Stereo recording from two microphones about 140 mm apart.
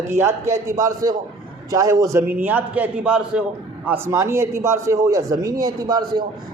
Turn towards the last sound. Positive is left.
turn(degrees=-30)  # may be behind; listen again after turning